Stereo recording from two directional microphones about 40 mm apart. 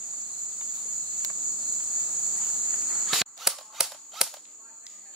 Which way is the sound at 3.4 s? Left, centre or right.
Centre.